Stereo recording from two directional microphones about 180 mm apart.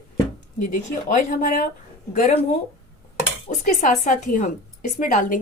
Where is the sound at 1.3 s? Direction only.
45° left (ahead or behind).